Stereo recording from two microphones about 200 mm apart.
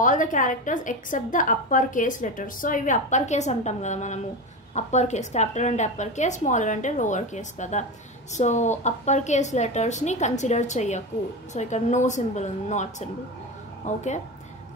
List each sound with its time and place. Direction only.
0.0 s a woman's voice: 40° left (ahead or behind)